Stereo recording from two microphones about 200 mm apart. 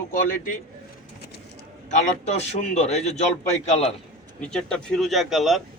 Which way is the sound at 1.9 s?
35° left (ahead or behind).